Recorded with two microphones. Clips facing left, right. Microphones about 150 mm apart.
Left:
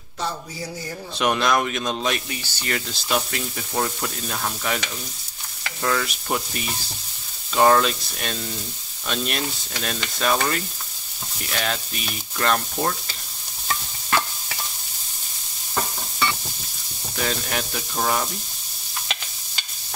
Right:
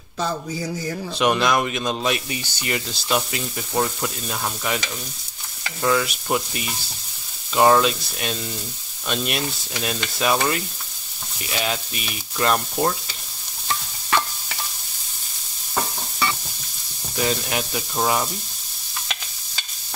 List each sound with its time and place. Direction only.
1.1 s speech: centre (ahead or behind)
2.2 s frying: 15° right (ahead or behind)
2.7 s speech: 5° right (ahead or behind)
9.0 s frying: 5° right (ahead or behind)
17.2 s frying: 5° right (ahead or behind)